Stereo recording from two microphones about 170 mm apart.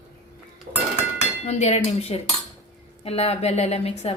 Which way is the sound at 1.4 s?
40° left (ahead or behind).